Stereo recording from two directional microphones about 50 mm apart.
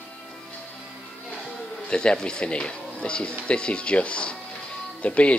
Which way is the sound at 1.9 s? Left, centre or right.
Centre.